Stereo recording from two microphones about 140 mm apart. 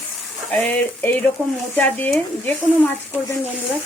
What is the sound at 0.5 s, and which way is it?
Speech, 10° left (ahead or behind).